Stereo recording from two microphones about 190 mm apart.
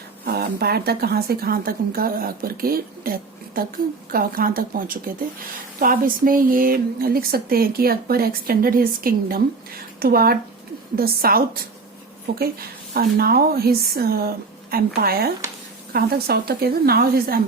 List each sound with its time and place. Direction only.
0.3 s speech: 55° right (ahead or behind)
12.9 s speech: 55° right (ahead or behind)